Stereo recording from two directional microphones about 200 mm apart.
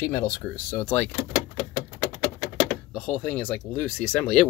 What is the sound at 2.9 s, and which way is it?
Speech, 5° left (ahead or behind).